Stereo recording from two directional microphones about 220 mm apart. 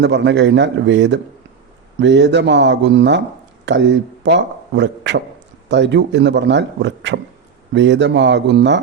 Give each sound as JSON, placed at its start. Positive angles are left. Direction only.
{"t": 0.0, "sound": "a man's voice", "side_deg": -50}